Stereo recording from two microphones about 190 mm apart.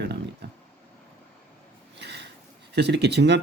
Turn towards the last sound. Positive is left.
turn(degrees=-60)  # may be behind; listen again after turning